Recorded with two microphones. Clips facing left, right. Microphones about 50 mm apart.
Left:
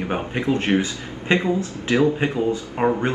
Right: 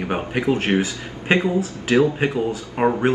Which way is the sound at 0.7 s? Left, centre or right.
Right.